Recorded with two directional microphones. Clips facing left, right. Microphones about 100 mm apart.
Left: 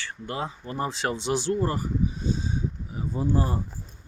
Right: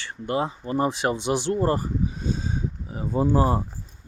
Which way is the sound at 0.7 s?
15° right (ahead or behind).